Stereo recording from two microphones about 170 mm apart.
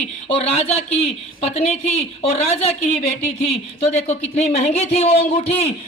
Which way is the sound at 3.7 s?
40° left (ahead or behind).